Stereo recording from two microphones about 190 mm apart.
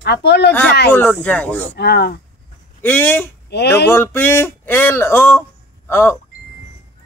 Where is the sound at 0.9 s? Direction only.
10° left (ahead or behind).